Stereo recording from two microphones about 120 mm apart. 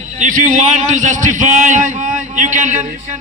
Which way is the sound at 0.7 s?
90° right.